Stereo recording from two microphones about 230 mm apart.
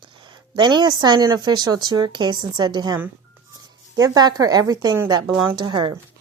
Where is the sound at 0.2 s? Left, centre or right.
Centre.